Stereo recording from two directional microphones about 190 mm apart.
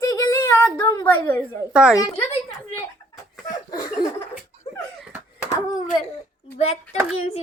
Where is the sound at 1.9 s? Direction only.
15° left (ahead or behind).